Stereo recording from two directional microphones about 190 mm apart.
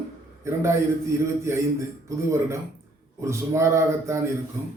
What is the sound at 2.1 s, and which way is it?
A man's voice, 15° right (ahead or behind).